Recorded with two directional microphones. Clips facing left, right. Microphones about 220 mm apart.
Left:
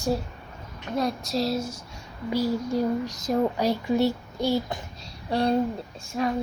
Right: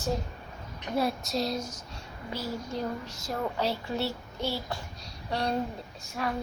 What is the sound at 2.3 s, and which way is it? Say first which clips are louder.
Speech: left 9 dB; 10° left (ahead or behind).